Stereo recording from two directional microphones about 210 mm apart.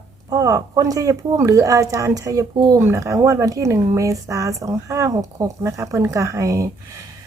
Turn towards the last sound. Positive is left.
turn(degrees=-15)  # may be behind; listen again after turning